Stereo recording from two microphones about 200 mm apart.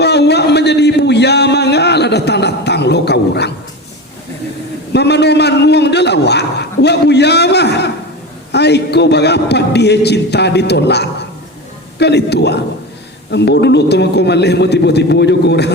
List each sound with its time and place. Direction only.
0.0 s a man's voice: 55° left (ahead or behind)
4.9 s a man's voice: 55° left (ahead or behind)